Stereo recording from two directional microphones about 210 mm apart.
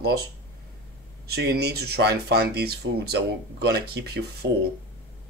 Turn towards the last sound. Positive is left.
turn(degrees=-50)  # may be behind; listen again after turning